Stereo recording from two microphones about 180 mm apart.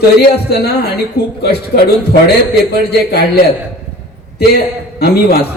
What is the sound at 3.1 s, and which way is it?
Speech, 60° left (ahead or behind).